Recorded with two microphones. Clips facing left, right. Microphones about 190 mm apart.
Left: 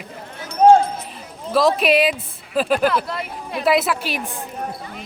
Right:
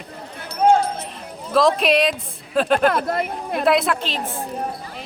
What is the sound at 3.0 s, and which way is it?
Speech, 50° right (ahead or behind).